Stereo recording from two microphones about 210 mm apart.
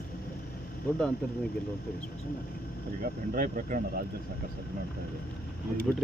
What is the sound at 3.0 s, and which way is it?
Speech, 40° right (ahead or behind).